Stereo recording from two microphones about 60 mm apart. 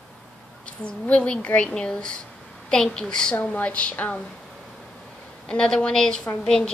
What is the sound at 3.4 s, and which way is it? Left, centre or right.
Speech, left.